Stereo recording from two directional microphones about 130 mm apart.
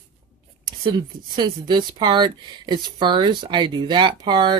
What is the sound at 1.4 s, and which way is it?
Speech, 35° right (ahead or behind).